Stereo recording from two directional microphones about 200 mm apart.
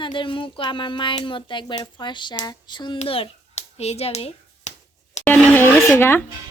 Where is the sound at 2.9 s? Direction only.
30° left (ahead or behind).